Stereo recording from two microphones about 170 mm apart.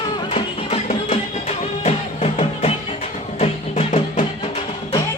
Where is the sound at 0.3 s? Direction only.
35° left (ahead or behind).